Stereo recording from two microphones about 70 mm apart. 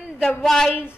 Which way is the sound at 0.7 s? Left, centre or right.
Left.